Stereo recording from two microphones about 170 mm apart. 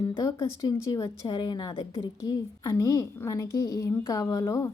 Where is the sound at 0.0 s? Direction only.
20° left (ahead or behind).